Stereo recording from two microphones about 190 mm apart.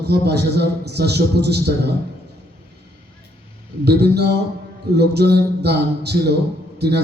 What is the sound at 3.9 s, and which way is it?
A man's voice, 60° right (ahead or behind).